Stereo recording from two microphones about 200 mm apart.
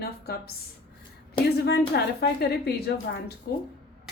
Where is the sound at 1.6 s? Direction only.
55° left (ahead or behind).